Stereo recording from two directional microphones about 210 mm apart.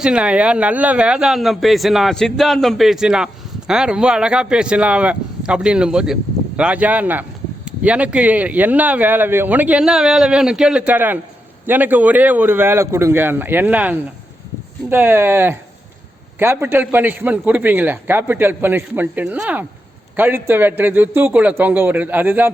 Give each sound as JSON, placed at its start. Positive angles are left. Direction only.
{"t": 0.0, "sound": "speech", "side_deg": -5}